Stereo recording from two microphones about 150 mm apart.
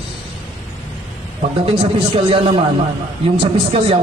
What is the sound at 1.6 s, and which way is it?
A man's voice, 40° right (ahead or behind).